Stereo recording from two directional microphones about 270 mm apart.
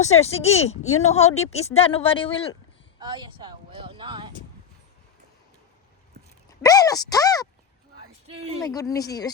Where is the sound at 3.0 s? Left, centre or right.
Centre.